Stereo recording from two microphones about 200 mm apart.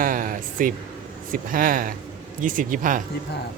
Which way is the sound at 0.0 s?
40° right (ahead or behind).